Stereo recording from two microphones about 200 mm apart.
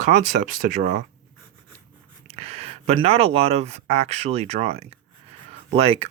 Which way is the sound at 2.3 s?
30° right (ahead or behind).